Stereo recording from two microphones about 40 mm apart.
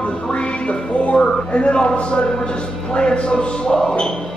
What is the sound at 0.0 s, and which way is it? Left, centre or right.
Music, left.